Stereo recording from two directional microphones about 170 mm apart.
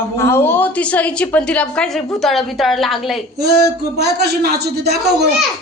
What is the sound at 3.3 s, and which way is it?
Speech, 70° right (ahead or behind).